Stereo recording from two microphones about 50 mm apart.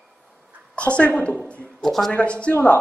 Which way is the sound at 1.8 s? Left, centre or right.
Centre.